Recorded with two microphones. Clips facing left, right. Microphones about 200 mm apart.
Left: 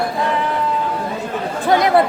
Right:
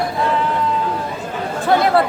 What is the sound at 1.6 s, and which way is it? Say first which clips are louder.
Speech: left 1 dB; 15° left (ahead or behind).